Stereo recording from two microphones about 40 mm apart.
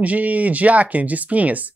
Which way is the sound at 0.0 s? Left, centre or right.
Right.